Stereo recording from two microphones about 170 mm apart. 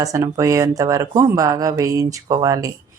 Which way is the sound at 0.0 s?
20° right (ahead or behind).